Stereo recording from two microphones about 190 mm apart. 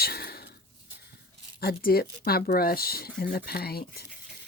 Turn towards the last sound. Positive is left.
turn(degrees=55)  # may be behind; listen again after turning